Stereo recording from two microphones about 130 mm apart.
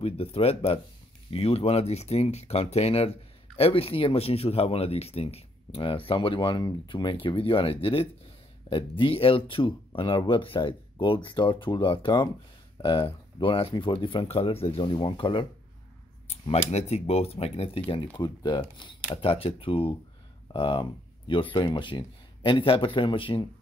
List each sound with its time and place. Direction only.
0.0 s speech: 50° left (ahead or behind)
16.3 s speech: 50° left (ahead or behind)
18.1 s speech: 35° left (ahead or behind)